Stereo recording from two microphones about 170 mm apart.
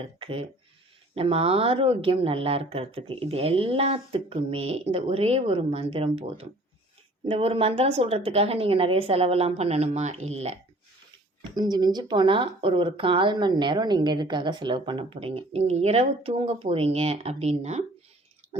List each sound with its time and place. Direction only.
0.0 s speech: 35° right (ahead or behind)
11.4 s speech: 25° right (ahead or behind); by 17.8 s 40° right (ahead or behind)